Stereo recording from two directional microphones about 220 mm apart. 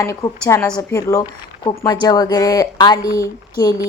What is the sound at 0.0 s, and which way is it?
Speech, 15° left (ahead or behind).